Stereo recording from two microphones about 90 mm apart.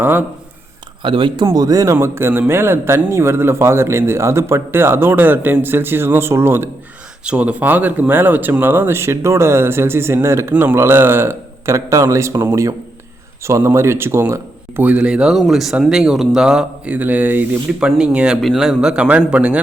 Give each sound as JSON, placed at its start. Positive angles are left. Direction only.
{"t": 0.0, "sound": "speech", "side_deg": -25}
{"t": 1.0, "sound": "speech", "side_deg": -65}
{"t": 1.5, "sound": "speech", "side_deg": -45}
{"t": 7.3, "sound": "speech", "side_deg": -15}
{"t": 10.5, "sound": "speech", "side_deg": -20}
{"t": 14.8, "sound": "speech", "side_deg": -10}
{"t": 16.9, "sound": "speech", "side_deg": -20}